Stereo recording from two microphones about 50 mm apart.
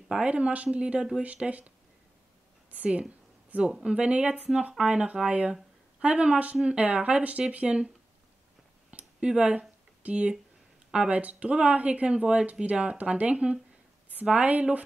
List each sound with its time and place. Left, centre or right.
0.1 s speech: right
2.7 s a woman's voice: right
4.7 s speech: centre
5.0 s speech: right
8.9 s a sound: right
10.9 s speech: right